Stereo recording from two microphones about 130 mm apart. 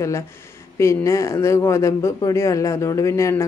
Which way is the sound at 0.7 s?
20° left (ahead or behind).